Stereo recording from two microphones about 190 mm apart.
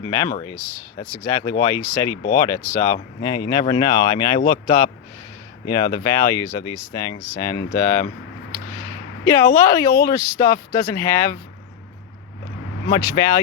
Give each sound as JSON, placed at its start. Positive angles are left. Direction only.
{"t": 0.1, "sound": "speech", "side_deg": 15}
{"t": 8.5, "sound": "a sound", "side_deg": 15}
{"t": 10.1, "sound": "speech", "side_deg": 20}
{"t": 12.9, "sound": "speech", "side_deg": 20}